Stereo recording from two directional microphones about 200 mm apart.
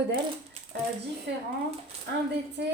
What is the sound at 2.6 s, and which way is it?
Speech, 60° right (ahead or behind).